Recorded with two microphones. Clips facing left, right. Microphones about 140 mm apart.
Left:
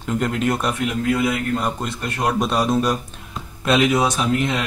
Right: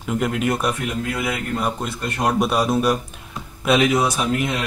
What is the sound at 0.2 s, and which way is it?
Speech, 5° right (ahead or behind).